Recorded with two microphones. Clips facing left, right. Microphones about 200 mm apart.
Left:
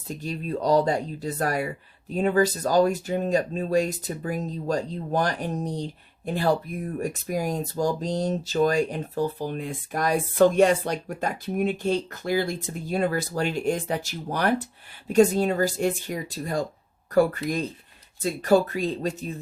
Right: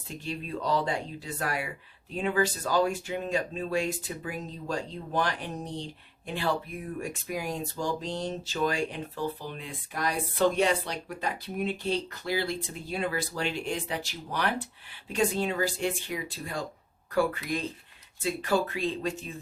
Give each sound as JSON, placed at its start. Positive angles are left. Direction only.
{"t": 0.1, "sound": "speech", "side_deg": 40}